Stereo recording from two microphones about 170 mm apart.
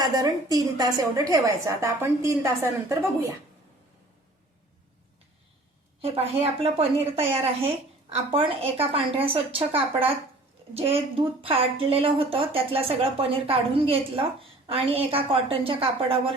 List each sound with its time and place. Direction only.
0.0 s a woman's voice: 20° right (ahead or behind)
6.0 s a woman's voice: 35° right (ahead or behind)